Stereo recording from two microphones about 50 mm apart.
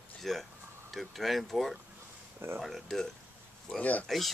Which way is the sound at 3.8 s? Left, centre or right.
Left.